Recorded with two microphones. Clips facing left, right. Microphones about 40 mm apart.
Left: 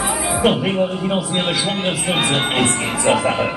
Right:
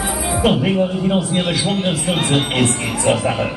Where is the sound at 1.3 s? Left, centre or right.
Left.